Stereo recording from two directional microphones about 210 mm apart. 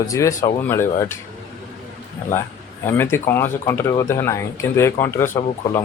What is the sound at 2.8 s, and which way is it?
Speech, 10° left (ahead or behind).